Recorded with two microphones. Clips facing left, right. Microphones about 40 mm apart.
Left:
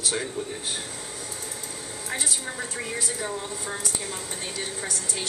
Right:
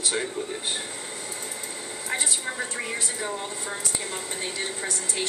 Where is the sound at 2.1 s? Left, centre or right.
Centre.